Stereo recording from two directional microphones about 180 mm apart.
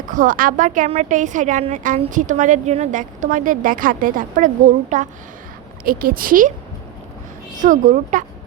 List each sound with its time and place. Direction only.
0.1 s a woman's voice: 45° right (ahead or behind)
7.5 s a woman's voice: 45° right (ahead or behind)